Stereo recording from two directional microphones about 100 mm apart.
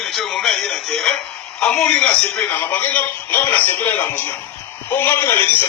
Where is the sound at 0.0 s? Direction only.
5° left (ahead or behind).